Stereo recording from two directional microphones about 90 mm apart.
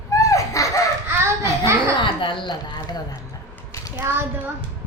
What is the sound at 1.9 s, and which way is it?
Speech, 65° left (ahead or behind).